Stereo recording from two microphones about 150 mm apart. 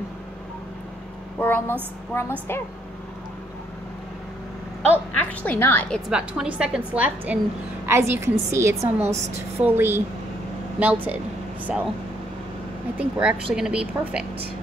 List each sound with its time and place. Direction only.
1.4 s a woman's voice: 15° left (ahead or behind)
4.9 s a woman's voice: 10° left (ahead or behind)
6.0 s a woman's voice: 5° right (ahead or behind)
12.9 s a woman's voice: 5° right (ahead or behind)